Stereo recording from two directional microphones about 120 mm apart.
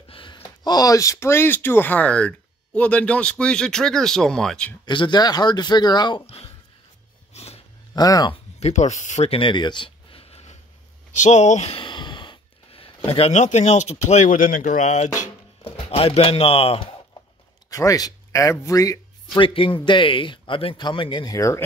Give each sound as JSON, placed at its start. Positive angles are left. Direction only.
{"t": 0.1, "sound": "a sound", "side_deg": 45}
{"t": 0.4, "sound": "speech", "side_deg": 30}
{"t": 4.8, "sound": "speech", "side_deg": 40}
{"t": 6.2, "sound": "speech", "side_deg": 55}
{"t": 7.3, "sound": "a sound", "side_deg": 60}
{"t": 7.9, "sound": "speech", "side_deg": 35}
{"t": 8.5, "sound": "speech", "side_deg": 65}
{"t": 11.1, "sound": "speech", "side_deg": 80}
{"t": 11.7, "sound": "speech", "side_deg": 40}
{"t": 15.6, "sound": "speech", "side_deg": 50}
{"t": 17.6, "sound": "speech", "side_deg": 30}
{"t": 19.4, "sound": "speech", "side_deg": 45}